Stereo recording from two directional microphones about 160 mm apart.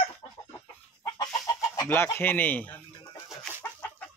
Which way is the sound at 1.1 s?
20° left (ahead or behind).